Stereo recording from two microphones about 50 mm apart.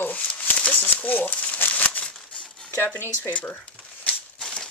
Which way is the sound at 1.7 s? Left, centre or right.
Left.